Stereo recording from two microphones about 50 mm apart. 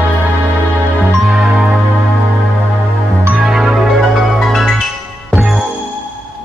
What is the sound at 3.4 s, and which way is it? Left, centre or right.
Music, centre.